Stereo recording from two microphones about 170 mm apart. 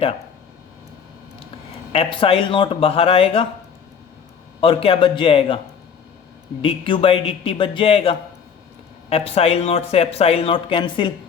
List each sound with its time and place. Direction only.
1.9 s speech: 35° left (ahead or behind)
4.6 s speech: 30° left (ahead or behind)
6.6 s speech: 30° left (ahead or behind)